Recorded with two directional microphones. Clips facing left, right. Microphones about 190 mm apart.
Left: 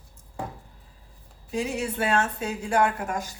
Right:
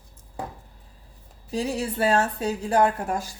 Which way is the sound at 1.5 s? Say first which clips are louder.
Right 1 dB; 35° right (ahead or behind).